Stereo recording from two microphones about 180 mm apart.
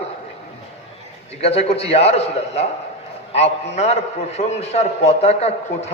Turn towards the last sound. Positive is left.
turn(degrees=35)  # may be behind; listen again after turning